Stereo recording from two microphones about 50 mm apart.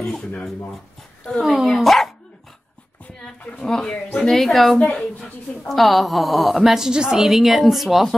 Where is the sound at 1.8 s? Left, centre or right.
Centre.